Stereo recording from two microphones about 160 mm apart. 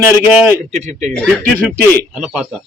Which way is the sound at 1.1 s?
10° left (ahead or behind).